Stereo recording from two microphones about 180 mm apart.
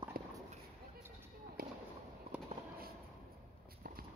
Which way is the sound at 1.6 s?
55° right (ahead or behind).